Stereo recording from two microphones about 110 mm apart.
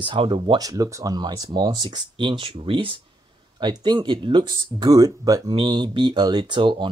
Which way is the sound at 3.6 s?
40° right (ahead or behind).